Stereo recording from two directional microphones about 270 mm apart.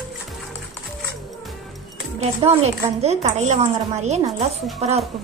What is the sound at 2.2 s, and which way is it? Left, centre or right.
A woman's voice, right.